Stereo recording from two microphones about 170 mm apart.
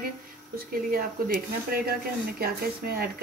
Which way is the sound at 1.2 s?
60° right (ahead or behind).